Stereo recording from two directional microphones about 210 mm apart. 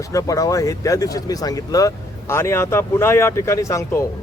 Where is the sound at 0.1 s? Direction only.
15° left (ahead or behind).